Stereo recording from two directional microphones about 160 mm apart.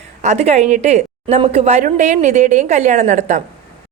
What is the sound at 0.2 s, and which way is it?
A woman's voice, 45° right (ahead or behind).